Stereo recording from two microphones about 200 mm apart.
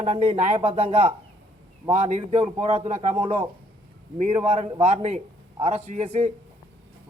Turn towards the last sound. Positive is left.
turn(degrees=-35)  # may be behind; listen again after turning